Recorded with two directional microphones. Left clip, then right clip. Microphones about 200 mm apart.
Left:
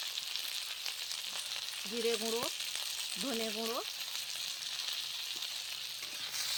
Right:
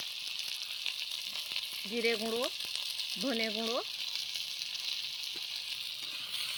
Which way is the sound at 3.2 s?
10° right (ahead or behind).